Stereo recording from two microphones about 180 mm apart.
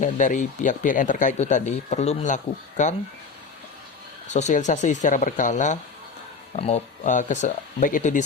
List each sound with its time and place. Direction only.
0.0 s speech: 45° left (ahead or behind)
4.3 s speech: 40° left (ahead or behind)